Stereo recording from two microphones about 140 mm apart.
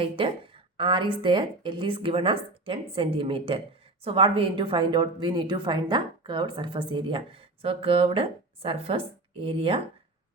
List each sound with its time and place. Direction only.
0.0 s a woman's voice: 40° right (ahead or behind)